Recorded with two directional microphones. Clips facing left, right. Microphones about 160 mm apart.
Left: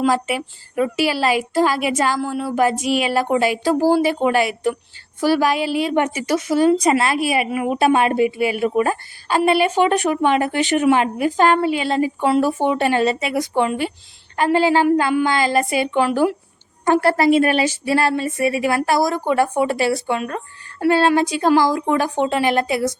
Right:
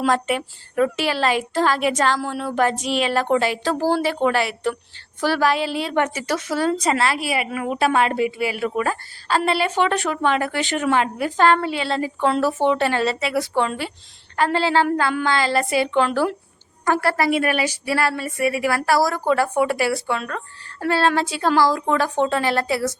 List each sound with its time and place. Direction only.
0.0 s a woman's voice: 5° left (ahead or behind)